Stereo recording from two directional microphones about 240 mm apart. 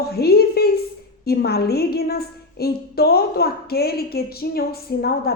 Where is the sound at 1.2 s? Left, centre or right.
Left.